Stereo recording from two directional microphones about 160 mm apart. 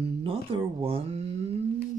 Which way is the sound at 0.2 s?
35° right (ahead or behind).